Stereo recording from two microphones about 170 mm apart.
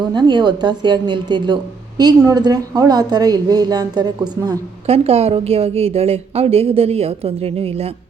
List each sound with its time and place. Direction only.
0.0 s a woman's voice: 25° right (ahead or behind)
4.9 s a woman's voice: 35° right (ahead or behind)